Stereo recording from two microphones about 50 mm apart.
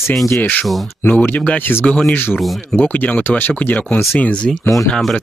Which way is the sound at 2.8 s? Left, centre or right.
Left.